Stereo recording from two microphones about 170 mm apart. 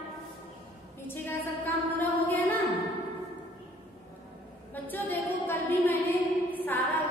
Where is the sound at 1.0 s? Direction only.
10° left (ahead or behind).